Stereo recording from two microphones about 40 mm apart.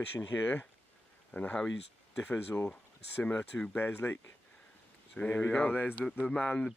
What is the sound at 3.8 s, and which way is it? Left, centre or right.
Speech, left.